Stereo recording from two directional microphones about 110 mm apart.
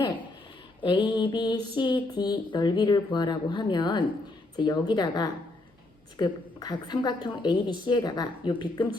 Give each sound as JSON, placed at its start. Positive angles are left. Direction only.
{"t": 0.8, "sound": "a woman's voice", "side_deg": 45}